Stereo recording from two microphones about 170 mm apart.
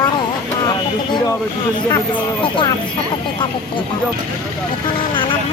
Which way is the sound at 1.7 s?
25° left (ahead or behind).